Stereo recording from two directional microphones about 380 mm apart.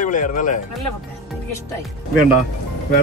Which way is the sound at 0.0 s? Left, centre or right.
Centre.